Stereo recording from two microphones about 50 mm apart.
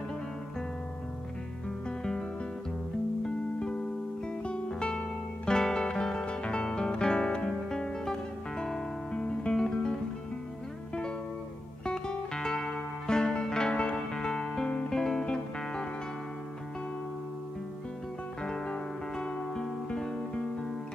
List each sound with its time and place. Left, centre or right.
1.9 s music: centre
3.5 s music: centre
11.8 s music: centre
18.4 s music: centre